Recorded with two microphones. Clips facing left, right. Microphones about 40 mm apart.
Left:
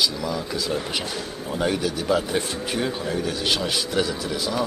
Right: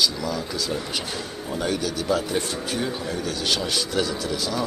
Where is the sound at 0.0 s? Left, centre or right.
Centre.